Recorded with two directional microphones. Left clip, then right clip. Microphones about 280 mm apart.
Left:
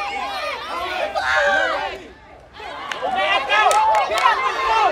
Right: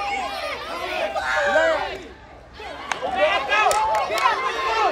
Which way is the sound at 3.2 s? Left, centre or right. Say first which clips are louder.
Left 2 dB; left.